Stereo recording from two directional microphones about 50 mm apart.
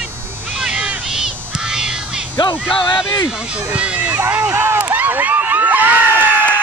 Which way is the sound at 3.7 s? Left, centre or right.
Right.